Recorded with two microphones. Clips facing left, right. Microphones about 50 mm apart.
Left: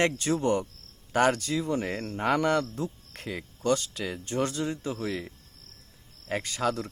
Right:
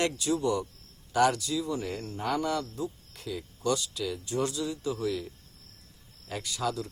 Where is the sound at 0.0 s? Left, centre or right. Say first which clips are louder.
Left 2 dB; left.